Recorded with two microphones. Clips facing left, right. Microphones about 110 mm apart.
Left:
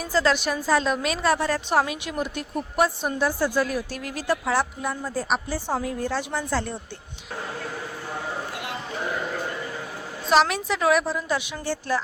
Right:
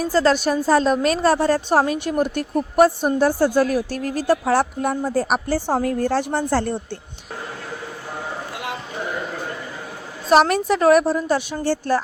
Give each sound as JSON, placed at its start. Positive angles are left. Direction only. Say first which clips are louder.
{"t": 0.0, "sound": "a woman's voice", "louder": "right 5 dB", "side_deg": -40}
{"t": 3.3, "sound": "a woman's voice", "louder": "right 6 dB", "side_deg": -65}
{"t": 3.8, "sound": "a woman's voice", "louder": "right 7 dB", "side_deg": -40}
{"t": 5.1, "sound": "speech", "louder": "right 6 dB", "side_deg": -70}
{"t": 5.7, "sound": "a woman's voice", "louder": "right 6 dB", "side_deg": -55}
{"t": 10.2, "sound": "a woman's voice", "louder": "right 5 dB", "side_deg": -50}